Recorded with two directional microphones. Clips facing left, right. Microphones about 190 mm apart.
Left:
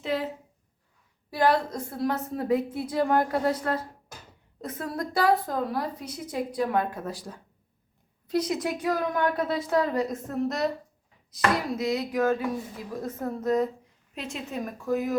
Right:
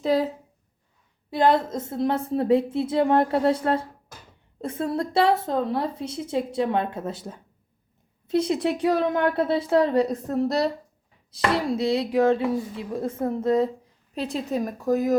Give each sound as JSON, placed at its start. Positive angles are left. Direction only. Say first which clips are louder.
{"t": 0.0, "sound": "a woman's voice", "louder": "right 7 dB", "side_deg": -40}
{"t": 1.3, "sound": "a woman's voice", "louder": "right 3 dB", "side_deg": -20}